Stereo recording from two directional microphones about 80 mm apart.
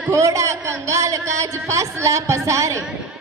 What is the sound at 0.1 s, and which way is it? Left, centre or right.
A woman's voice, right.